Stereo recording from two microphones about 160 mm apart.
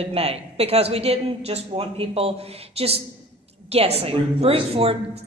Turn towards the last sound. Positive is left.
turn(degrees=-40)  # may be behind; listen again after turning